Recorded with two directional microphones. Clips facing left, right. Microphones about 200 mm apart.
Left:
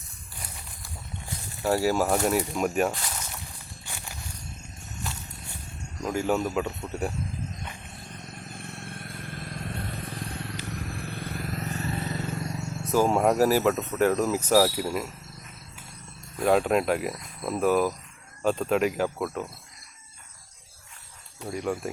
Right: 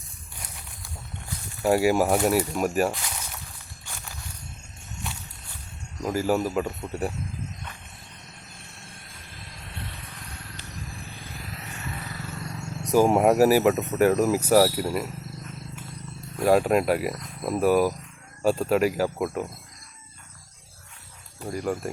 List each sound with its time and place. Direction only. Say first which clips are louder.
1.6 s speech: right 3 dB; 15° right (ahead or behind)
6.0 s a man's voice: right 2 dB; 5° right (ahead or behind)
8.5 s vehicle: left 8 dB; 60° left (ahead or behind); by 10.2 s 40° left (ahead or behind)
10.7 s vehicle: left 5 dB; 60° left (ahead or behind); by 12.3 s 25° left (ahead or behind)
12.8 s speech: right 3 dB; 15° right (ahead or behind)
16.4 s speech: right 2 dB; 5° right (ahead or behind)
21.5 s a man's voice: right 1 dB; centre (ahead or behind)